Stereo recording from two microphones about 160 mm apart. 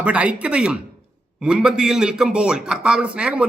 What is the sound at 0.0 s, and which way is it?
A man's voice, 10° right (ahead or behind).